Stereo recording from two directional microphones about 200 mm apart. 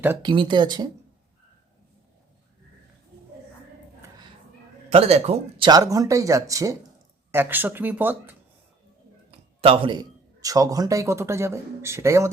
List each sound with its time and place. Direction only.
0.2 s speech: 25° right (ahead or behind)
4.9 s a man's voice: 30° right (ahead or behind); by 8.4 s 10° right (ahead or behind)
9.6 s a man's voice: 30° right (ahead or behind)